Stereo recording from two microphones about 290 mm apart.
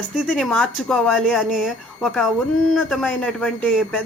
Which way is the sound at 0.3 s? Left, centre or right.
Centre.